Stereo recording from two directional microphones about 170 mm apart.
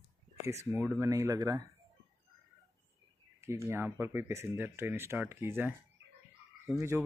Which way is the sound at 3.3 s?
15° right (ahead or behind).